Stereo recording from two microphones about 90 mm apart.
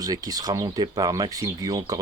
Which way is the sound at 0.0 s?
45° right (ahead or behind).